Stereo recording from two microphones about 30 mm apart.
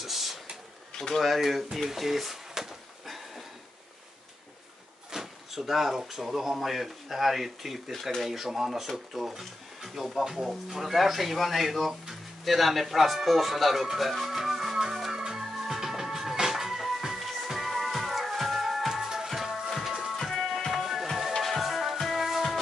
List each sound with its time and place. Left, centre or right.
0.0 s a sound: centre
1.2 s speech: centre
5.1 s drawer open or close: centre
6.0 s speech: centre
13.9 s music: centre
15.4 s music: centre
19.2 s music: centre
20.2 s music: centre
20.7 s music: centre